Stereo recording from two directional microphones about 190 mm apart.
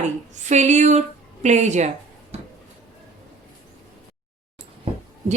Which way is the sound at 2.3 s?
35° right (ahead or behind).